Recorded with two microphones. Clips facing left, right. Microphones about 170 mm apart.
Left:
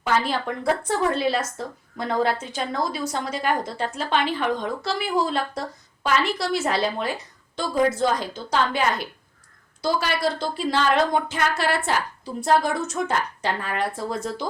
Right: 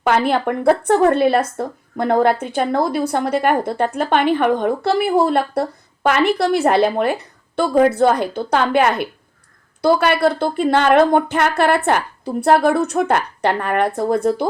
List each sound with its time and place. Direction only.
0.0 s speech: 60° right (ahead or behind)